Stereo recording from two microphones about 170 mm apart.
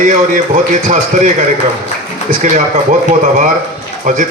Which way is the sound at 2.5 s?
50° right (ahead or behind).